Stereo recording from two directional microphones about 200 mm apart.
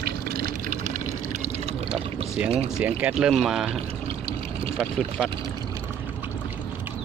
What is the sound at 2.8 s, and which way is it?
Speech, 5° right (ahead or behind).